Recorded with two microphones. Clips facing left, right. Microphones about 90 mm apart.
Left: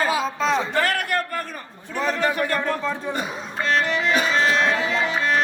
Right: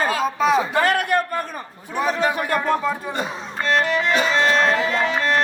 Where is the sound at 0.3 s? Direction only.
10° right (ahead or behind).